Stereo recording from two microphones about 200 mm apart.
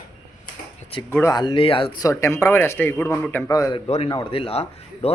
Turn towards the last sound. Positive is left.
turn(degrees=30)  # may be behind; listen again after turning